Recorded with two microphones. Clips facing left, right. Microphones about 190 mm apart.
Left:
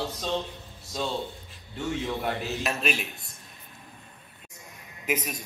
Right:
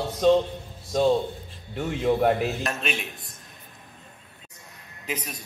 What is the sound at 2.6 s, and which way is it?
Speech, 5° left (ahead or behind).